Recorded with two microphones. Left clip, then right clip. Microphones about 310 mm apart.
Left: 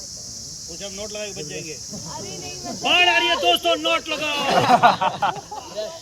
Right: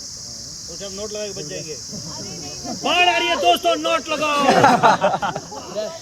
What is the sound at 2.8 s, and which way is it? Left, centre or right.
Speech, centre.